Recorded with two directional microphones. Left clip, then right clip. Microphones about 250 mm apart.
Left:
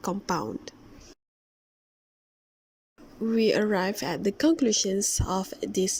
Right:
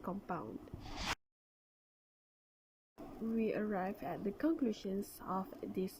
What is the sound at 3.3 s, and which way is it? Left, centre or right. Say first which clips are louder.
Speech: left 14 dB; left.